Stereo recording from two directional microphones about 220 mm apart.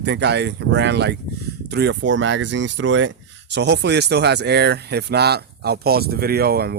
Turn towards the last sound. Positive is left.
turn(degrees=-45)  # may be behind; listen again after turning